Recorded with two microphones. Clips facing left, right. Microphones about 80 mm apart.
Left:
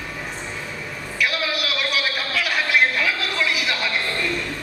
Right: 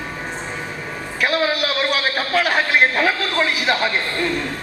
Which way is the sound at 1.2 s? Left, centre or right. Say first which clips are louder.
Right 5 dB; right.